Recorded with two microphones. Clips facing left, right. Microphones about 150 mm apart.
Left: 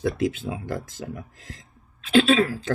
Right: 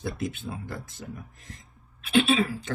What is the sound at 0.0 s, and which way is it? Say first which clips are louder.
Speech: left 8 dB; 90° left.